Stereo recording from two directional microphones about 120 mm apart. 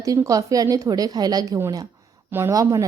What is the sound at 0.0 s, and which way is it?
A woman's voice, 30° right (ahead or behind).